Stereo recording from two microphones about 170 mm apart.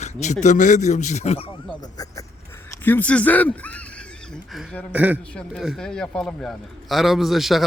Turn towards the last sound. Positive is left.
turn(degrees=0)  # may be behind; listen again after turning